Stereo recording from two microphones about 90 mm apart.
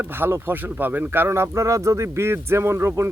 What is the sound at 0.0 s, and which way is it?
Speech, 25° right (ahead or behind).